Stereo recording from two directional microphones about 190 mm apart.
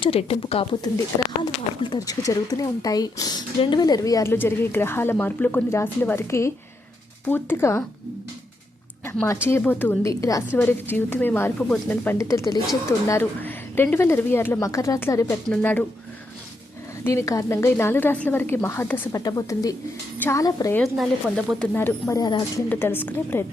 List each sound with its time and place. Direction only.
0.0 s speech: 30° left (ahead or behind); by 7.9 s 15° left (ahead or behind)
9.0 s speech: 15° left (ahead or behind)
17.0 s speech: 15° left (ahead or behind)
20.8 s speech: centre (ahead or behind); by 22.6 s 20° left (ahead or behind)
22.7 s speech: 10° left (ahead or behind)